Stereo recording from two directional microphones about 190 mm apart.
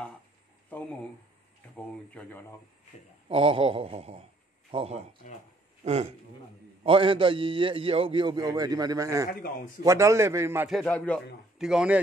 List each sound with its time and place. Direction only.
2.0 s a man's voice: 10° left (ahead or behind)
3.3 s a man's voice: 30° right (ahead or behind)
10.7 s a man's voice: 5° left (ahead or behind)